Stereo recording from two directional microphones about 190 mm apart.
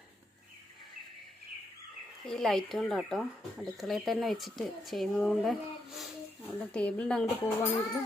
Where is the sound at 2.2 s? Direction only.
Centre (ahead or behind).